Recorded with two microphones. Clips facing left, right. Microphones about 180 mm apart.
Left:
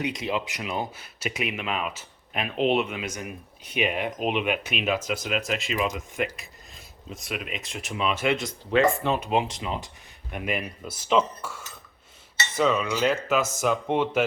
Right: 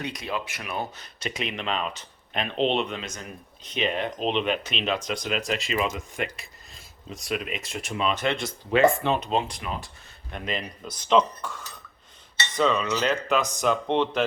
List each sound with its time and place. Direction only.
0.0 s speech: 20° left (ahead or behind)
0.9 s speech: 10° left (ahead or behind)
10.3 s speech: 10° left (ahead or behind)